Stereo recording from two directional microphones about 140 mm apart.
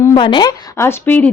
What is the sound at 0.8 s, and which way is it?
Speech, 15° left (ahead or behind).